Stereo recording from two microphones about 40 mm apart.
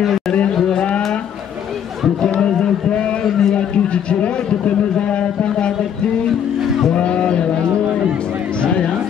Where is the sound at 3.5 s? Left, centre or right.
Left.